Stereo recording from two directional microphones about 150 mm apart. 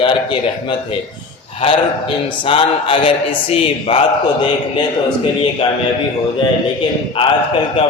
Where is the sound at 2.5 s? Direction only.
35° left (ahead or behind).